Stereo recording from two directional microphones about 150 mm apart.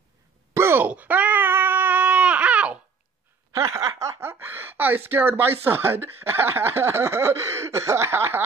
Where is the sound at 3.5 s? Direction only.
20° right (ahead or behind).